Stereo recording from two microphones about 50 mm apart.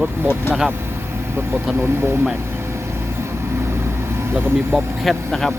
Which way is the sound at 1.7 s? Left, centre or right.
Right.